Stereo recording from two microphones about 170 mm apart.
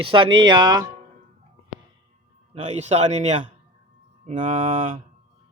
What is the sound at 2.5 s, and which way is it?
A man's voice, 40° right (ahead or behind).